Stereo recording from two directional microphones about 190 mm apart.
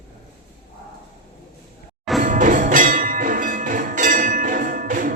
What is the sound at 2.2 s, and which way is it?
Music, 45° right (ahead or behind).